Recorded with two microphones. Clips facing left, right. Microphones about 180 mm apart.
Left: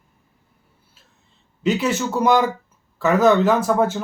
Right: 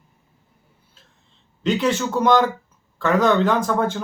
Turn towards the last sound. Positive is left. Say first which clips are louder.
# left 2 dB
turn(degrees=5)  # may be behind; listen again after turning